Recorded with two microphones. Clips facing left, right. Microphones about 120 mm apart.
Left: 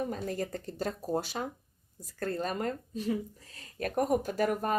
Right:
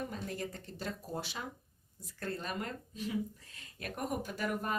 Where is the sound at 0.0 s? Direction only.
40° left (ahead or behind).